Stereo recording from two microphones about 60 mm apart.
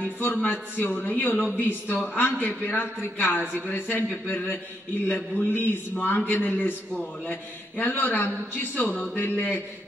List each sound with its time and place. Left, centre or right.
0.4 s a man's voice: left